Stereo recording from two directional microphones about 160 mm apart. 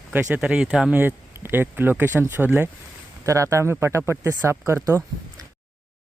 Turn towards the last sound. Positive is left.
turn(degrees=-15)  # may be behind; listen again after turning